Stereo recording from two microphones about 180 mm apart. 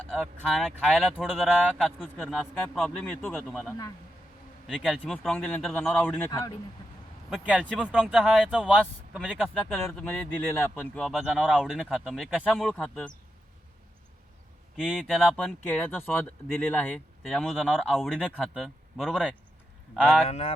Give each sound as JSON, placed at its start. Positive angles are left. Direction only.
{"t": 0.1, "sound": "speech", "side_deg": 0}
{"t": 7.3, "sound": "speech", "side_deg": -5}
{"t": 14.8, "sound": "speech", "side_deg": -5}
{"t": 20.2, "sound": "speech", "side_deg": 35}